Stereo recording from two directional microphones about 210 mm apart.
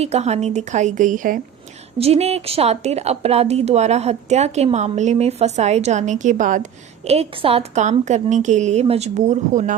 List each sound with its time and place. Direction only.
0.0 s a woman's voice: 30° right (ahead or behind)